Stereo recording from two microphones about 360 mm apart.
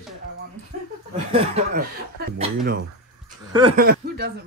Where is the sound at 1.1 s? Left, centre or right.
Centre.